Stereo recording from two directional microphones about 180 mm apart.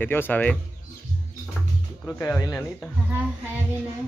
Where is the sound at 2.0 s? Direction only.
5° left (ahead or behind).